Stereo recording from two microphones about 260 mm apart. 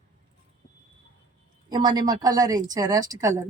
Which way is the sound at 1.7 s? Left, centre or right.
Centre.